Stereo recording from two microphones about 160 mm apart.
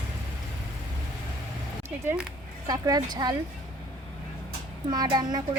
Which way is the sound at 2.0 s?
10° right (ahead or behind).